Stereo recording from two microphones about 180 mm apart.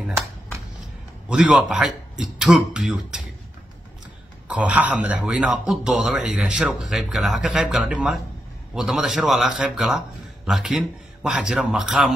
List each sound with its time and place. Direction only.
1.3 s a man's voice: 5° right (ahead or behind)
4.5 s a man's voice: 10° right (ahead or behind)